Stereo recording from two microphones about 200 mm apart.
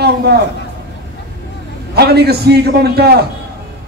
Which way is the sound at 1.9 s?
55° right (ahead or behind).